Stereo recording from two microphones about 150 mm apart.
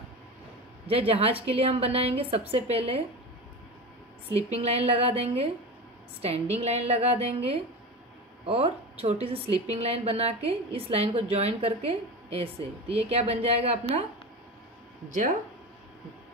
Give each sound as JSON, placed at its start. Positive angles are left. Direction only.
{"t": 0.8, "sound": "a woman's voice", "side_deg": -40}
{"t": 4.3, "sound": "a woman's voice", "side_deg": -45}
{"t": 15.0, "sound": "speech", "side_deg": -60}